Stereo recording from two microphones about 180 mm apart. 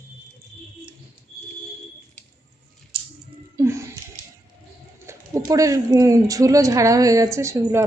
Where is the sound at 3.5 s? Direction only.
15° right (ahead or behind).